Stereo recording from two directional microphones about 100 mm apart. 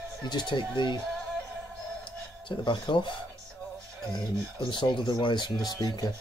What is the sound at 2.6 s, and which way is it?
Speech, 55° left (ahead or behind).